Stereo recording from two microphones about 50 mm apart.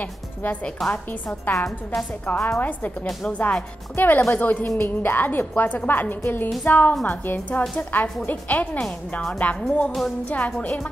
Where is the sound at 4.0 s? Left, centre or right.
Left.